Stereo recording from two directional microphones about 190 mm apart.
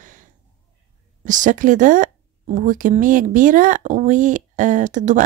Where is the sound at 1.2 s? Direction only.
40° right (ahead or behind).